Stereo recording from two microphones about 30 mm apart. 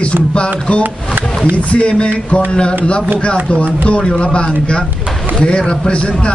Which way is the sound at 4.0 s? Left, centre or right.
Left.